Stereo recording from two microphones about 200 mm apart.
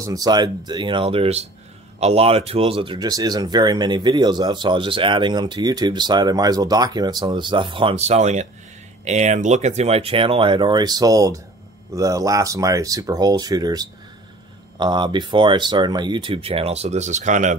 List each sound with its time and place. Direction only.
0.0 s speech: 20° right (ahead or behind); by 17.6 s 40° right (ahead or behind)